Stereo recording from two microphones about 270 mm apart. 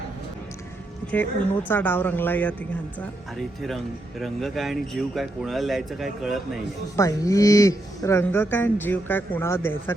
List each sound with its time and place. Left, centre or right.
1.1 s speech: centre
4.2 s a man's voice: centre
6.9 s speech: centre